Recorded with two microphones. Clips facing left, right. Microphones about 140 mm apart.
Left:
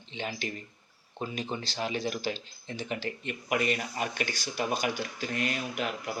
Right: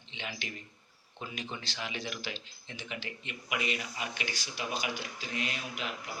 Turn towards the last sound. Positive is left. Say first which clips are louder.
# left 6 dB
turn(degrees=50)  # may be behind; listen again after turning